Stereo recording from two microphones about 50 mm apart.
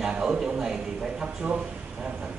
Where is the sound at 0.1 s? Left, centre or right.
Centre.